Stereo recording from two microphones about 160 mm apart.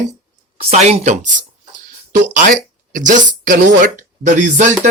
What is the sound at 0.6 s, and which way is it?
Speech, 45° right (ahead or behind).